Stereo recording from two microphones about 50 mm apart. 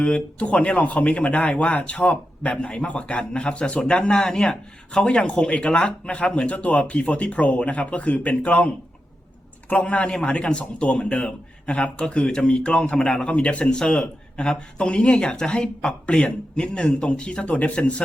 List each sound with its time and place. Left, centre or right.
0.0 s speech: left
13.2 s speech: left